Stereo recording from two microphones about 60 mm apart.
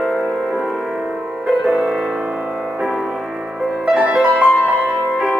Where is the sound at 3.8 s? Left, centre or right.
Centre.